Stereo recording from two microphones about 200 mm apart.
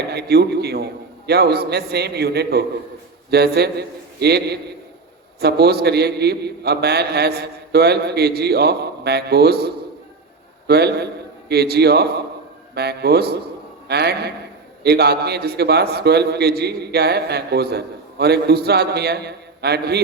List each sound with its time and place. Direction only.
0.1 s a man's voice: 55° right (ahead or behind)